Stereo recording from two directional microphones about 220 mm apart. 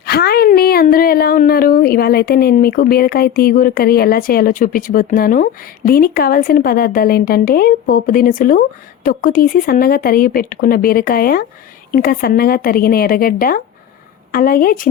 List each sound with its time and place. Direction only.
0.0 s speech: 45° left (ahead or behind)